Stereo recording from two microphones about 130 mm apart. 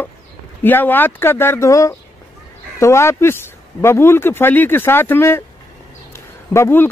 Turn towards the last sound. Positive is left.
turn(degrees=20)  # may be behind; listen again after turning